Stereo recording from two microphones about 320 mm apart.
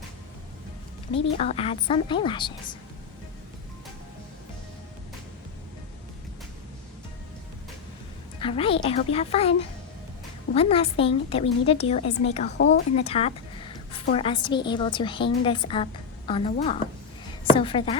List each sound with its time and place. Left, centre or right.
1.1 s a woman's voice: centre
8.4 s a woman's voice: centre